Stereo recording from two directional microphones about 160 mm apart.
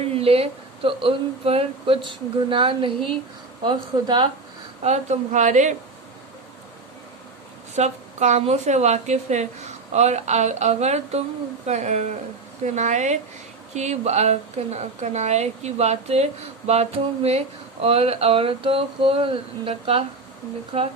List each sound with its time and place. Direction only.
0.0 s speech: 35° right (ahead or behind)
4.8 s a woman's voice: 45° right (ahead or behind)
7.8 s a woman's voice: 45° right (ahead or behind)